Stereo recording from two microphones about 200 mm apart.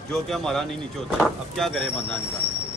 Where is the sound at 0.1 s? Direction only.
Centre (ahead or behind).